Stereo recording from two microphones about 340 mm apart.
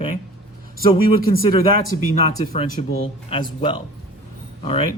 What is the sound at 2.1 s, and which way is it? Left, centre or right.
Speech, centre.